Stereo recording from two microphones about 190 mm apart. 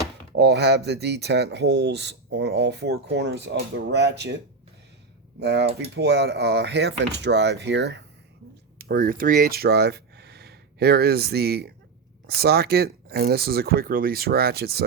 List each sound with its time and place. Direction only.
0.3 s speech: 60° right (ahead or behind)
5.4 s speech: 65° right (ahead or behind)
8.8 s speech: 50° right (ahead or behind)